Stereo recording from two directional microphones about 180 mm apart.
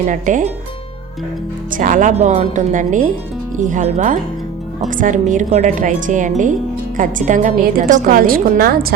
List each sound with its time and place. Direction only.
0.1 s speech: 45° right (ahead or behind)
1.7 s speech: 50° right (ahead or behind)